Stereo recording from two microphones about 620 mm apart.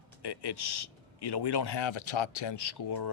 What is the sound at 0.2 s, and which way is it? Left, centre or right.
Speech, left.